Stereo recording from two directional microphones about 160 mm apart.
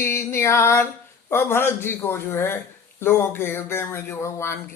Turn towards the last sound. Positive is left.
turn(degrees=15)  # may be behind; listen again after turning